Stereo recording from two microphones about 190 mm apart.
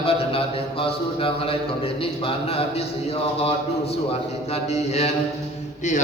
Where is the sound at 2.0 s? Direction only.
30° left (ahead or behind).